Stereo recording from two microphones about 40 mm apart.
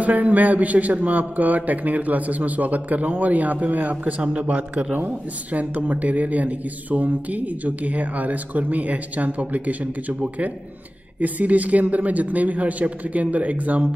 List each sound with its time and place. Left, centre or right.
0.0 s speech: right
4.2 s speech: right
4.9 s speech: right
11.1 s speech: right